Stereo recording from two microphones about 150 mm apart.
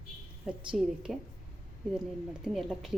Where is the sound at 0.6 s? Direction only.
5° right (ahead or behind).